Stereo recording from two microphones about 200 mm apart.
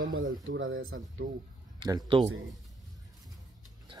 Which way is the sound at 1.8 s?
25° right (ahead or behind).